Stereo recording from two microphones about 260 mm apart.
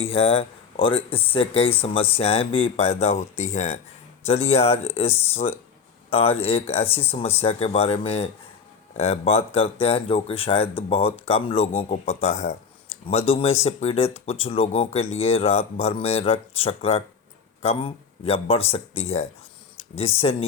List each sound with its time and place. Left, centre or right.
0.0 s speech: left